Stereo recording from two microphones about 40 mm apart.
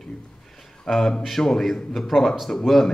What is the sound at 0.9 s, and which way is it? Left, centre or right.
A man's voice, centre.